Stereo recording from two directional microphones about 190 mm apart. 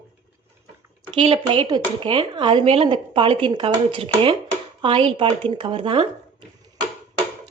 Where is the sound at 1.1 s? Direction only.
25° right (ahead or behind).